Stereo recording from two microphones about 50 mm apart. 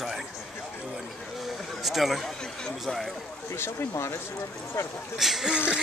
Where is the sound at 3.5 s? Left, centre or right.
Left.